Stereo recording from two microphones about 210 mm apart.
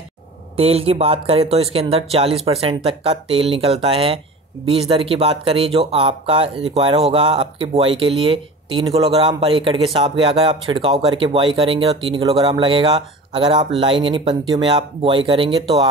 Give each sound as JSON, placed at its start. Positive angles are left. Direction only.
{"t": 0.6, "sound": "speech", "side_deg": -30}